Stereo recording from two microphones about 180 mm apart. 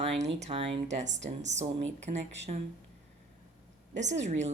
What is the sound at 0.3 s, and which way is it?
Speech, 35° right (ahead or behind).